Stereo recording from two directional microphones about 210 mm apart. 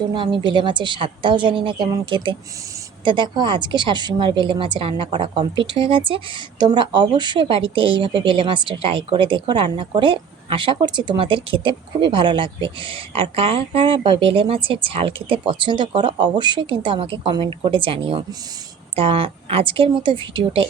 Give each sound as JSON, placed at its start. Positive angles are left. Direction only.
{"t": 0.1, "sound": "speech", "side_deg": -20}